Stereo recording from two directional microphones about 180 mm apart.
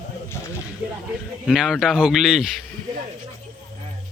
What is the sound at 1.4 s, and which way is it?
Speech, 5° right (ahead or behind).